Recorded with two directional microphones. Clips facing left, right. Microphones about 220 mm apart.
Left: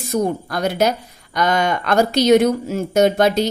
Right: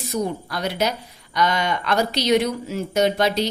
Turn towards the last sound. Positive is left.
turn(degrees=45)  # may be behind; listen again after turning